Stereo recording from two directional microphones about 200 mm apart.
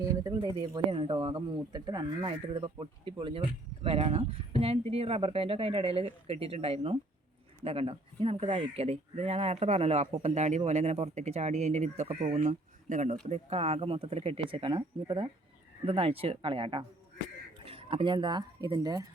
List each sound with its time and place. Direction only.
0.0 s speech: 15° right (ahead or behind)